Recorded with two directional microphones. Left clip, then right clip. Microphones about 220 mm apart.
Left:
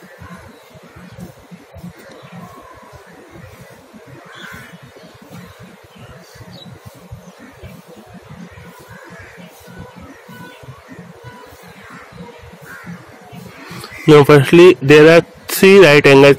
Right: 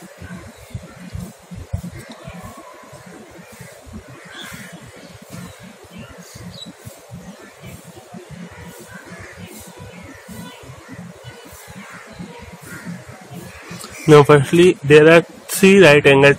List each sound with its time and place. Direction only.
14.0 s speech: 15° left (ahead or behind)